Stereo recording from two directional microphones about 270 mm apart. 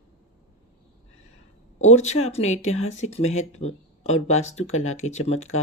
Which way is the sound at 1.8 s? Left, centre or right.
Left.